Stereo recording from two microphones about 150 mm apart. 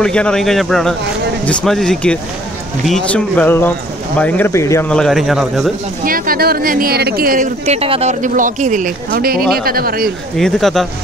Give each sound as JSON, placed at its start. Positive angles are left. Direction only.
{"t": 0.0, "sound": "a man's voice", "side_deg": 5}
{"t": 4.8, "sound": "a man's voice", "side_deg": 5}
{"t": 6.0, "sound": "speech", "side_deg": -70}
{"t": 10.3, "sound": "a man's voice", "side_deg": 0}